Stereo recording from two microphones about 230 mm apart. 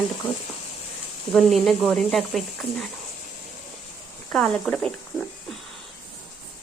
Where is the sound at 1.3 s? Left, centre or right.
Centre.